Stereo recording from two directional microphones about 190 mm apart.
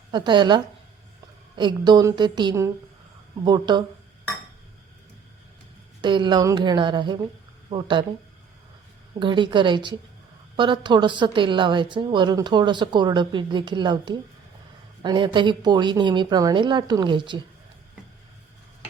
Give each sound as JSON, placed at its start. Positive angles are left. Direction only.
{"t": 0.1, "sound": "a woman's voice", "side_deg": -25}
{"t": 6.0, "sound": "a woman's voice", "side_deg": -25}
{"t": 9.1, "sound": "a woman's voice", "side_deg": -25}